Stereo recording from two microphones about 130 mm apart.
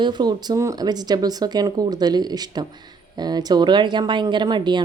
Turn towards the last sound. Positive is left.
turn(degrees=-35)  # may be behind; listen again after turning